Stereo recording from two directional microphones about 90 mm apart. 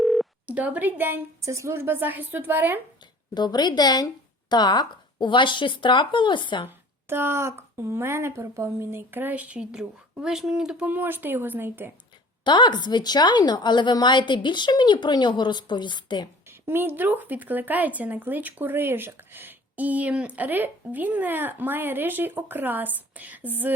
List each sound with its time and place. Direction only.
0.0 s telephone: centre (ahead or behind)
0.4 s speech: 15° right (ahead or behind)
3.3 s a woman's voice: 50° left (ahead or behind)
6.7 s speech: 25° right (ahead or behind); by 10.8 s 5° right (ahead or behind)
10.8 s speech: 20° right (ahead or behind)
12.5 s a woman's voice: 55° left (ahead or behind)
16.5 s speech: 25° right (ahead or behind)